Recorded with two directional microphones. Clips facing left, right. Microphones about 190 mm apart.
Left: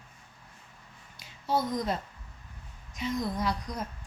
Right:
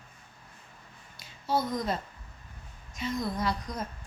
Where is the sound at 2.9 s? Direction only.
15° left (ahead or behind).